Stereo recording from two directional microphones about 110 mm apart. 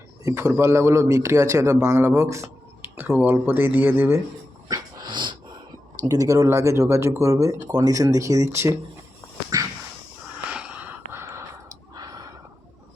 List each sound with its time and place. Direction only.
0.3 s a man's voice: 25° right (ahead or behind)
4.7 s dog: 45° right (ahead or behind)
6.1 s speech: 30° right (ahead or behind)
9.5 s a sound: 30° right (ahead or behind)
10.5 s a sound: 10° right (ahead or behind)
11.1 s sigh: 25° right (ahead or behind)